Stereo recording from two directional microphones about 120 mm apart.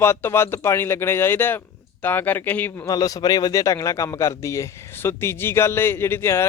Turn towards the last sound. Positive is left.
turn(degrees=20)  # may be behind; listen again after turning